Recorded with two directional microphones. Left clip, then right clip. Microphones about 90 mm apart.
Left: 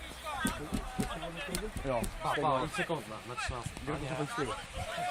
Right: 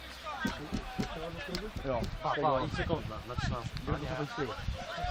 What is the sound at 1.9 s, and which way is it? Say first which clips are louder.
Speech: left 1 dB; 40° right (ahead or behind).